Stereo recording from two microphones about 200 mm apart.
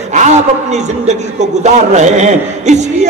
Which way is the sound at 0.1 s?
35° right (ahead or behind).